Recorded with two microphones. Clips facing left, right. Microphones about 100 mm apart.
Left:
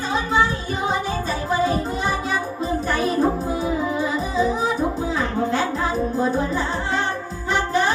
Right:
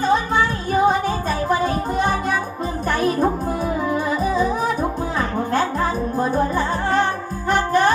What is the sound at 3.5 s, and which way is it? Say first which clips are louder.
Music: right 1 dB; 55° right (ahead or behind).